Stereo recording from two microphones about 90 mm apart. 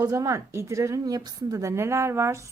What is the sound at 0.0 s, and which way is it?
A woman's voice, 40° right (ahead or behind).